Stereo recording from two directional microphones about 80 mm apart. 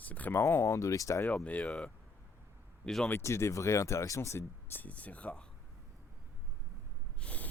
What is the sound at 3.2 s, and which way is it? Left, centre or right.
Speech, left.